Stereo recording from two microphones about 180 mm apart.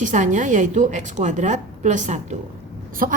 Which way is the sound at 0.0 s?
45° right (ahead or behind).